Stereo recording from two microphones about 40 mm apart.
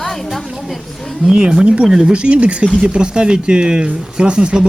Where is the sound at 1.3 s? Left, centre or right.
Right.